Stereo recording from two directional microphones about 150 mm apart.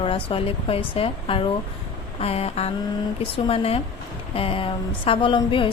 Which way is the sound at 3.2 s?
40° left (ahead or behind).